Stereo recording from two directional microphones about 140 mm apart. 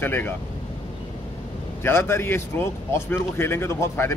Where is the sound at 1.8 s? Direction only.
15° left (ahead or behind).